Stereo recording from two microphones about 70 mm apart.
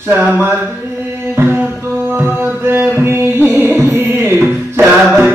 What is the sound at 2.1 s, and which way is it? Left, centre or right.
Music, right.